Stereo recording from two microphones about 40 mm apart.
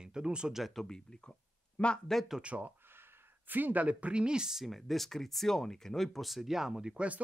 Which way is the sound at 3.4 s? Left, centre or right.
Right.